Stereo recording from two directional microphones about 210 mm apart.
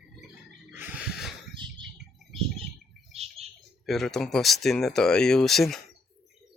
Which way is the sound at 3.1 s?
30° right (ahead or behind).